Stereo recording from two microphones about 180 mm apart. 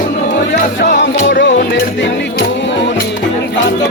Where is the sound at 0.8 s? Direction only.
85° left.